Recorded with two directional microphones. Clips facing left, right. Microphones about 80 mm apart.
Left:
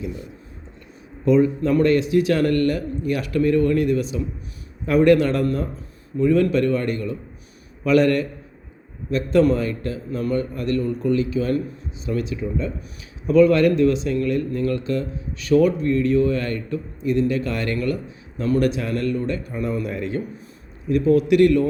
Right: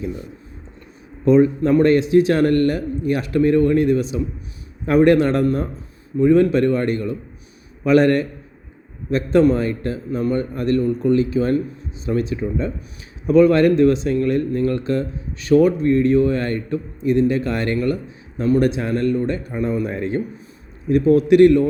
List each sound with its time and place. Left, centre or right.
1.2 s speech: right
10.5 s speech: right